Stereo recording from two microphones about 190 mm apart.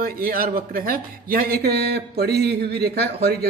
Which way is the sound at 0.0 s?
50° right (ahead or behind).